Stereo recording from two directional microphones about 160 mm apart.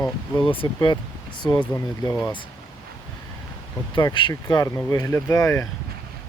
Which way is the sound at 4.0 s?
30° left (ahead or behind).